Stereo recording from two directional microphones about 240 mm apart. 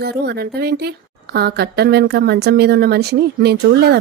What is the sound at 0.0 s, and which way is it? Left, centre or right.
A woman's voice, right.